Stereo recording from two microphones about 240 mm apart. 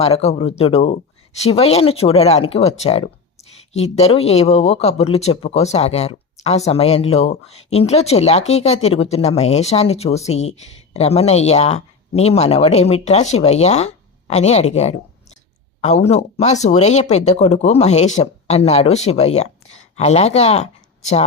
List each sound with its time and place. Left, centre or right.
0.0 s speech: left